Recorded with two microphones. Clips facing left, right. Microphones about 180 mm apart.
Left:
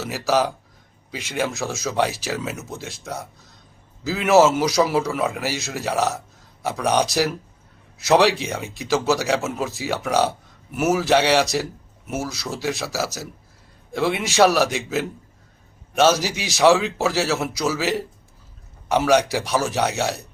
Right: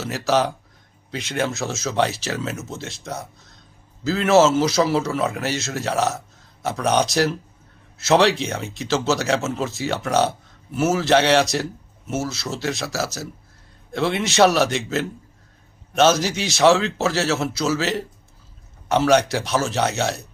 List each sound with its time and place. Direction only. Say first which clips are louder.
0.0 s speech: even; 10° left (ahead or behind)
4.0 s speech: even; 10° left (ahead or behind)
8.9 s speech: left 1 dB; 15° left (ahead or behind)